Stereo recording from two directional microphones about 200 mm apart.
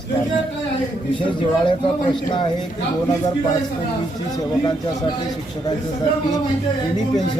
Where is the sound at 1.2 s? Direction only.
25° left (ahead or behind).